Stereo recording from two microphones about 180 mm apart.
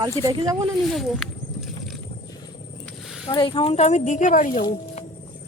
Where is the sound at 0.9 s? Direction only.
Centre (ahead or behind).